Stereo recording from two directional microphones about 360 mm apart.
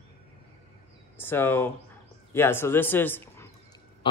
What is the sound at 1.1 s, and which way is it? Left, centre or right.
Speech, centre.